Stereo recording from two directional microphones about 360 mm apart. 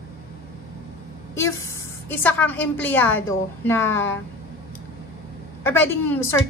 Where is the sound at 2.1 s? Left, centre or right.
Centre.